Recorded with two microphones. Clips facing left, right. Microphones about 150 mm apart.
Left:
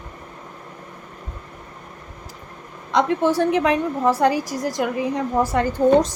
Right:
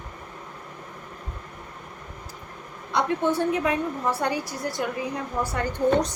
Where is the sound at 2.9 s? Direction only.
90° left.